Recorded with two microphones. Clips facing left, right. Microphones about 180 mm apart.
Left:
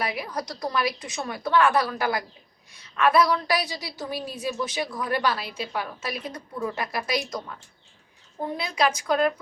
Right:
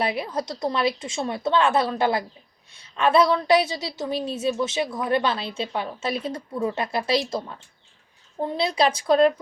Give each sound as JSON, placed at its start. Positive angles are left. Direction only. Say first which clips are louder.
{"t": 0.0, "sound": "a woman's voice", "louder": "right 4 dB", "side_deg": -30}